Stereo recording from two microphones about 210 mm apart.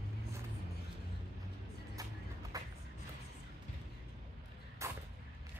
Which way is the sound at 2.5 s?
15° right (ahead or behind).